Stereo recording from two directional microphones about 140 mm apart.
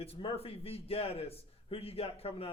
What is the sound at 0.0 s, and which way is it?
Speech, 45° left (ahead or behind).